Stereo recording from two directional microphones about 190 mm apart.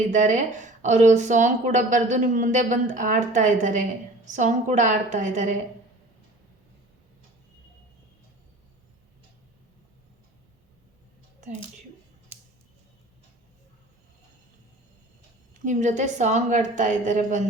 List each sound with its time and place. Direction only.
0.1 s a woman's voice: 40° right (ahead or behind)
15.6 s a woman's voice: 40° right (ahead or behind)